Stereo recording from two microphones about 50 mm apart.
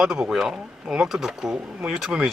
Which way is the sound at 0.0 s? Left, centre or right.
Centre.